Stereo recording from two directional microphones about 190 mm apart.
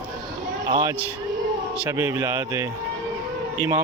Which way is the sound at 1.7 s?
10° right (ahead or behind).